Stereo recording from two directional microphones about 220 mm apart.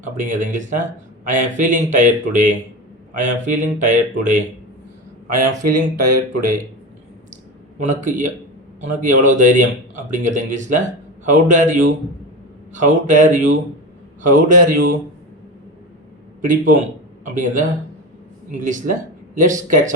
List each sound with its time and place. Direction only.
0.2 s speech: 35° right (ahead or behind)
7.8 s speech: 35° right (ahead or behind)
16.4 s speech: 35° right (ahead or behind)
19.3 s speech: 35° right (ahead or behind)